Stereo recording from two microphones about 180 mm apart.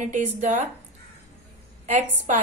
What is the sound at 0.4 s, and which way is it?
Speech, 40° right (ahead or behind).